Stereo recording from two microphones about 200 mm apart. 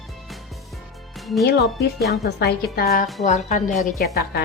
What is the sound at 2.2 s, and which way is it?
Speech, 55° left (ahead or behind).